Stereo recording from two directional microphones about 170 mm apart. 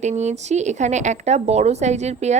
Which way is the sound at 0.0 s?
40° right (ahead or behind).